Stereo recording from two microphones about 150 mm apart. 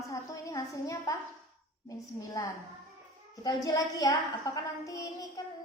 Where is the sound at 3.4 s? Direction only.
25° left (ahead or behind).